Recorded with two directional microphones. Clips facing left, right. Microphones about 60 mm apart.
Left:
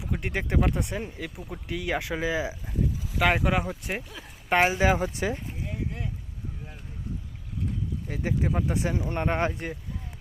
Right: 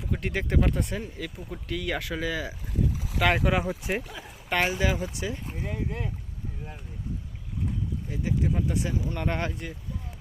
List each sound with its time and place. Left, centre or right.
0.0 s speech: centre
3.2 s speech: centre
4.4 s speech: left
8.1 s speech: left